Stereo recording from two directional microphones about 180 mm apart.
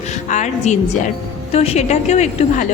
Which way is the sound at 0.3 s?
40° left (ahead or behind).